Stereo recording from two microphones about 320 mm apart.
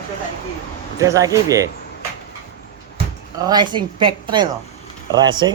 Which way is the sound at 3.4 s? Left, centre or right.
Centre.